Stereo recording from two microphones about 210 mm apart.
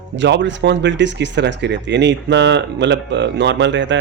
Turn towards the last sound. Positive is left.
turn(degrees=-60)  # may be behind; listen again after turning